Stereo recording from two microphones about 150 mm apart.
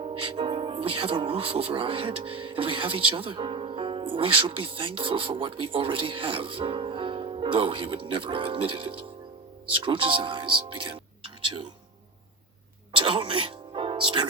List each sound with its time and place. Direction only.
0.0 s speech: 35° right (ahead or behind)
12.9 s speech: 35° right (ahead or behind)